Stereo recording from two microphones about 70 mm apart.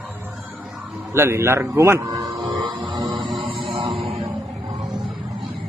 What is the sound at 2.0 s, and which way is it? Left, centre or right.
Music, right.